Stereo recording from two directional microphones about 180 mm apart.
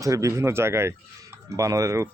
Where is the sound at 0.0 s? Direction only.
15° right (ahead or behind).